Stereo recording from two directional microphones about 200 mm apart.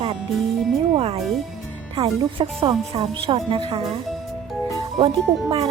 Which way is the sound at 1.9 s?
25° right (ahead or behind).